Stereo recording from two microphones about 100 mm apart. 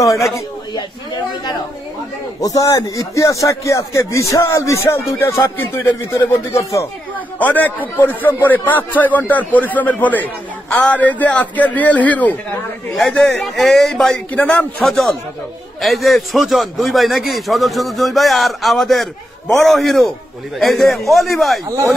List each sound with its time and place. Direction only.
2.4 s speech: 35° left (ahead or behind)
7.3 s a man's voice: 15° left (ahead or behind)
12.9 s a man's voice: 5° left (ahead or behind)
14.3 s a man's voice: 15° left (ahead or behind)
14.9 s a man's voice: centre (ahead or behind)
21.6 s speech: 30° right (ahead or behind)